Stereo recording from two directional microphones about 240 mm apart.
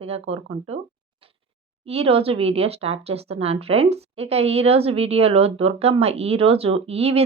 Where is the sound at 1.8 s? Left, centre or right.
Right.